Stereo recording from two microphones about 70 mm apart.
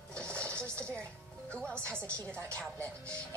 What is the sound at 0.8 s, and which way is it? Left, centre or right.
A woman's voice, centre.